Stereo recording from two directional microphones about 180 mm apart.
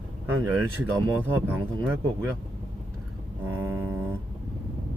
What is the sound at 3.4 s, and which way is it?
Speech, 15° right (ahead or behind).